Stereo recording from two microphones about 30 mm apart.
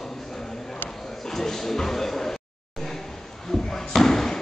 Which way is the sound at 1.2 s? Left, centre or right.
Centre.